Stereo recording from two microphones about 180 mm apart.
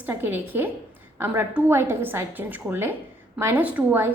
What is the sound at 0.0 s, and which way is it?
A woman's voice, 10° right (ahead or behind).